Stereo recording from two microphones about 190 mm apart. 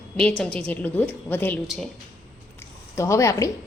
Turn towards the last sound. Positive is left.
turn(degrees=15)  # may be behind; listen again after turning